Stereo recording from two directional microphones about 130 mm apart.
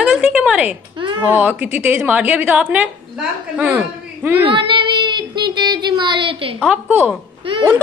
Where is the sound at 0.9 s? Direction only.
40° right (ahead or behind).